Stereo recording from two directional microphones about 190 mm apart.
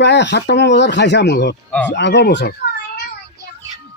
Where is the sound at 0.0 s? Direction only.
65° left (ahead or behind).